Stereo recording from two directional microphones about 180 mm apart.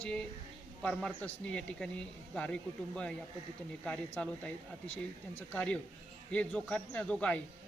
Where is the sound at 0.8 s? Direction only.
5° left (ahead or behind).